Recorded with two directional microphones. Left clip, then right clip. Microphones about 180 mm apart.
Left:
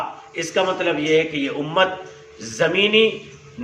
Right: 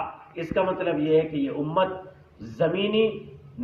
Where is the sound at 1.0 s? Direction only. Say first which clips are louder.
Left 3 dB; 10° left (ahead or behind).